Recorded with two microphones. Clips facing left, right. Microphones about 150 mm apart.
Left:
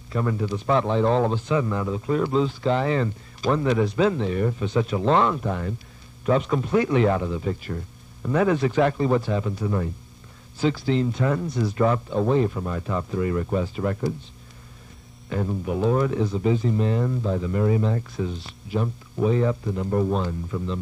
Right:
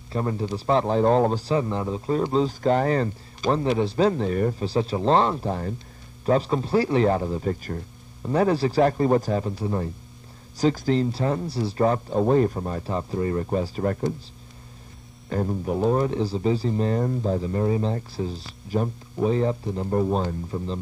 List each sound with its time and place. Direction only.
0.1 s speech: 30° right (ahead or behind)
3.4 s speech: 30° right (ahead or behind)
10.5 s speech: 40° right (ahead or behind)
15.2 s speech: 40° right (ahead or behind)